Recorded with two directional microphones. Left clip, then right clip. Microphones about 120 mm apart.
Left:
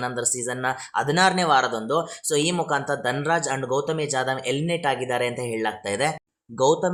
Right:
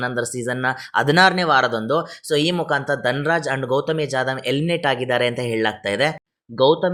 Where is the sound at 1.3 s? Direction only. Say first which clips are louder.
Right 3 dB; 25° right (ahead or behind).